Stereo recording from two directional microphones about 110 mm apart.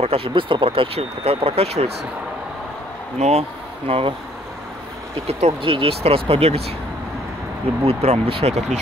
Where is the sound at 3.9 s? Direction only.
60° right (ahead or behind).